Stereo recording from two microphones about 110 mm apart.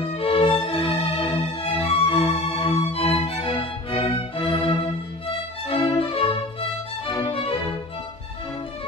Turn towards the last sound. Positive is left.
turn(degrees=50)  # may be behind; listen again after turning